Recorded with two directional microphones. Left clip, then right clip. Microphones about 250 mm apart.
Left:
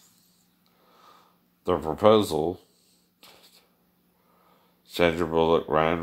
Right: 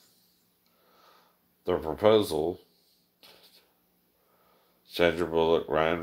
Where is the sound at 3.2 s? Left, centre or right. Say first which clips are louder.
Left 2 dB; left.